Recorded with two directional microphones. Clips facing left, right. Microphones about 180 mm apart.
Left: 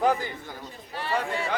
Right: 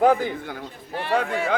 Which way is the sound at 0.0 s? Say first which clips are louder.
Right 6 dB; 55° right (ahead or behind).